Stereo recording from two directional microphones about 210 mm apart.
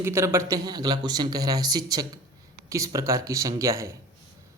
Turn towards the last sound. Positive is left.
turn(degrees=-15)  # may be behind; listen again after turning